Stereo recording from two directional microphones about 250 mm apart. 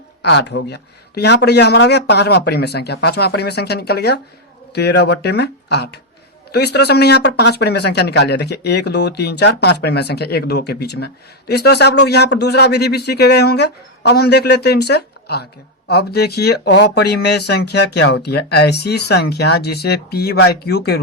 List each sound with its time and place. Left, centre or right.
0.2 s speech: left